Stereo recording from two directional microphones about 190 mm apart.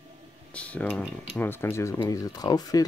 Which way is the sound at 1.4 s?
10° left (ahead or behind).